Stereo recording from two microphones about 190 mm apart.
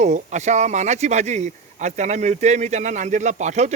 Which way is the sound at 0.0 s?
40° right (ahead or behind).